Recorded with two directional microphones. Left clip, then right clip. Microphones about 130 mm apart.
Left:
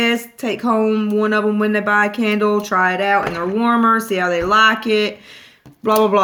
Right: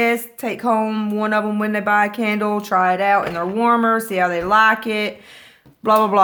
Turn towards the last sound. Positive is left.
turn(degrees=-35)  # may be behind; listen again after turning